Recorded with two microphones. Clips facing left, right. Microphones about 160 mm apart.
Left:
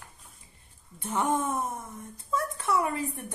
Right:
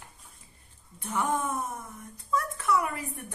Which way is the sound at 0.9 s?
25° left (ahead or behind).